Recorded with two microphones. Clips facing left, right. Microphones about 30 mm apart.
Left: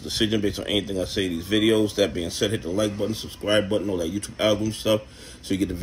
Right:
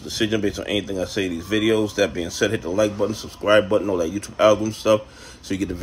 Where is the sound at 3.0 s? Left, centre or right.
Left.